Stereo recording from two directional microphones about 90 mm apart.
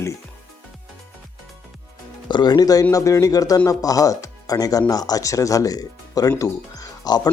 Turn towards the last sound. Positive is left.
turn(degrees=45)  # may be behind; listen again after turning